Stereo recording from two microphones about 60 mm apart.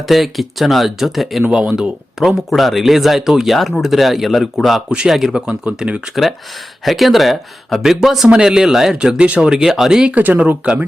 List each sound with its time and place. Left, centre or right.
0.1 s speech: centre
1.5 s speech: centre
2.2 s speech: centre
4.9 s speech: centre
5.5 s speech: centre
6.8 s speech: centre
9.0 s speech: centre